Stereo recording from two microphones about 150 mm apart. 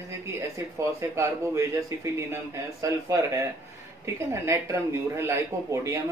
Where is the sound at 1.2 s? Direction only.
20° right (ahead or behind).